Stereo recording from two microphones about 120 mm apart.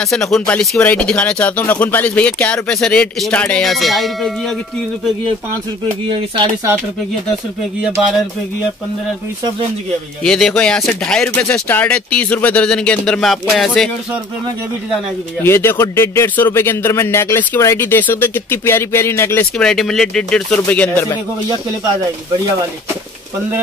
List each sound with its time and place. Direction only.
0.0 s speech: 5° left (ahead or behind)
3.7 s speech: centre (ahead or behind)
6.0 s speech: 45° right (ahead or behind)
8.0 s speech: 5° right (ahead or behind)
10.2 s speech: 5° left (ahead or behind)
15.4 s speech: 20° left (ahead or behind)
19.6 s speech: 5° left (ahead or behind)